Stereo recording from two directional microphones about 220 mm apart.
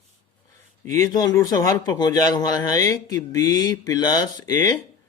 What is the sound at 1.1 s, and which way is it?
Speech, 20° left (ahead or behind).